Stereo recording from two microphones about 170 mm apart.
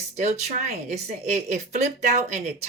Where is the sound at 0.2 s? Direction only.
40° right (ahead or behind).